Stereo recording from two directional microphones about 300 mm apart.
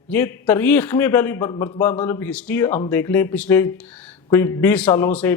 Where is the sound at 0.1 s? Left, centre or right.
Centre.